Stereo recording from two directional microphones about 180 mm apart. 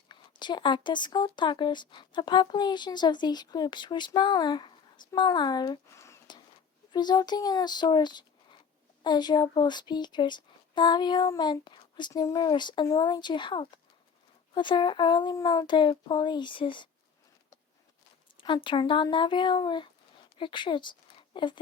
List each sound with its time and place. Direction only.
0.1 s speech: 25° left (ahead or behind)
18.3 s speech: 25° left (ahead or behind)